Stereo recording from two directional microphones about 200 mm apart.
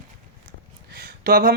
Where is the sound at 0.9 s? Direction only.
50° right (ahead or behind).